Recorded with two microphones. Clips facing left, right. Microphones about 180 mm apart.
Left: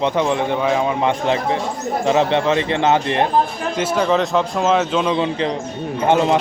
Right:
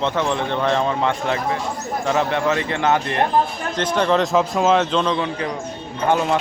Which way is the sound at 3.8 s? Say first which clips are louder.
Left 1 dB; 5° left (ahead or behind).